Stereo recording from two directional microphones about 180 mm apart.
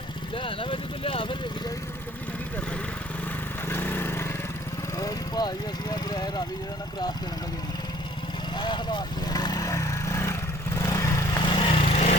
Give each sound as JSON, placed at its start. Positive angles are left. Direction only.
{"t": 0.3, "sound": "speech", "side_deg": 30}
{"t": 3.7, "sound": "lawn mower", "side_deg": 10}
{"t": 4.9, "sound": "vehicle", "side_deg": 20}
{"t": 8.5, "sound": "vehicle", "side_deg": 25}
{"t": 10.8, "sound": "lawn mower", "side_deg": 20}